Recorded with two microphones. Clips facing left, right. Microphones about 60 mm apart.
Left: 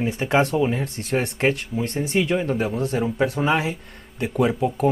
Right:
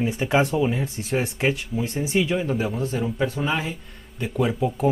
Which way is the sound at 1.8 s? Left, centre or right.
Left.